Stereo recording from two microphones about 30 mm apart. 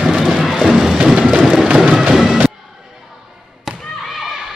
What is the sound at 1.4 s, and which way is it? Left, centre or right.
Music, centre.